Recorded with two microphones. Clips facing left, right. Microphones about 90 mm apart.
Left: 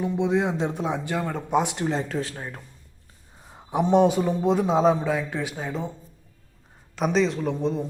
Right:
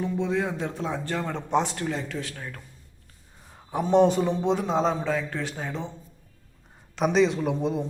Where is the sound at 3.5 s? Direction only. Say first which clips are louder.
Left 2 dB; 20° left (ahead or behind).